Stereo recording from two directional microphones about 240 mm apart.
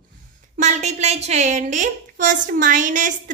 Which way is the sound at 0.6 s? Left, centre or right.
Right.